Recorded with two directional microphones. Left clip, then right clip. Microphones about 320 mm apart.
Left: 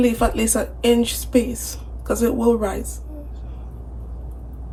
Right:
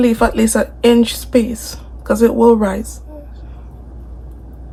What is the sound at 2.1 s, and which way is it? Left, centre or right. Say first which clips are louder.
Speech: right 8 dB; centre.